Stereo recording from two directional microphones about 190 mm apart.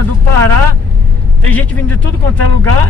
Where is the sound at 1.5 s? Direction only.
10° left (ahead or behind).